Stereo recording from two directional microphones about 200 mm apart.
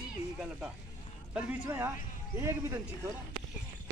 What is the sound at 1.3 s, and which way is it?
Speech, 10° right (ahead or behind).